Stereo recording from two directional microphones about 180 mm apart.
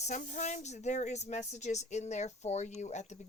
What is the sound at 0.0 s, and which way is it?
Speech, 40° left (ahead or behind).